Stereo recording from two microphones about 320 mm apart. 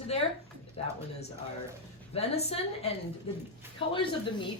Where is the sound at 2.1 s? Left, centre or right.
Centre.